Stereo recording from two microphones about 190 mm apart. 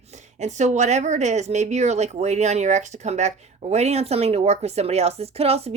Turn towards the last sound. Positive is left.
turn(degrees=-30)  # may be behind; listen again after turning